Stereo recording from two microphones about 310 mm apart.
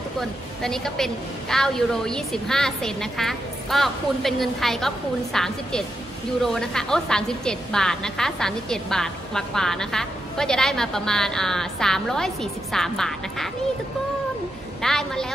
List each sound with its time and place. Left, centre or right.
0.2 s a woman's voice: centre
14.8 s a woman's voice: centre